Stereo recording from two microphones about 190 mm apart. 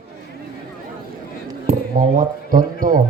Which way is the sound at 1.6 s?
45° right (ahead or behind).